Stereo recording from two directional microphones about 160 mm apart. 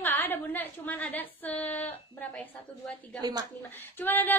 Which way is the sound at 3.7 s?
10° left (ahead or behind).